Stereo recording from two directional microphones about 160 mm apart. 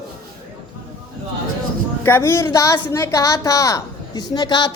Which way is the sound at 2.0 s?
15° left (ahead or behind).